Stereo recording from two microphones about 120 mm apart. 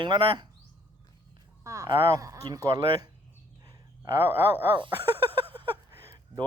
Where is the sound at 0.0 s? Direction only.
40° right (ahead or behind).